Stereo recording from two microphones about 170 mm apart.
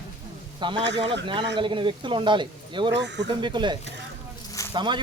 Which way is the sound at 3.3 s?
25° right (ahead or behind).